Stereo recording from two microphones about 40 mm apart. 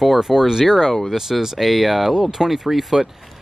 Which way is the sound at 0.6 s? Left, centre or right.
Centre.